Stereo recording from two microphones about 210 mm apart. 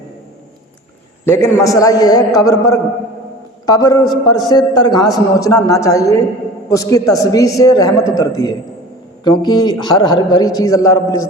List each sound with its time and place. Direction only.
1.2 s a man's voice: 10° left (ahead or behind)